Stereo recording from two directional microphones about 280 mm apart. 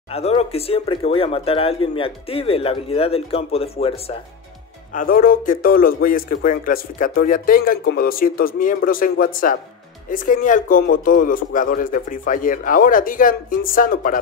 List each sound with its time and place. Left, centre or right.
0.1 s speech: left
4.9 s a man's voice: left